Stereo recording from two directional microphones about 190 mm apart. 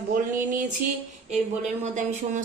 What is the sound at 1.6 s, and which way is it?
Speech, 40° right (ahead or behind).